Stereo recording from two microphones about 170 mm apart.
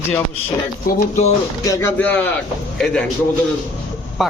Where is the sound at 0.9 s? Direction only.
45° left (ahead or behind).